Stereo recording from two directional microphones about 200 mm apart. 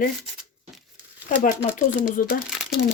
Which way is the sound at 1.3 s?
45° left (ahead or behind).